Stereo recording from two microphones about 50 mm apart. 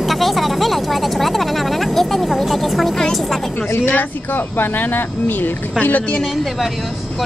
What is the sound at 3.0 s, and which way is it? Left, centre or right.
Music, centre.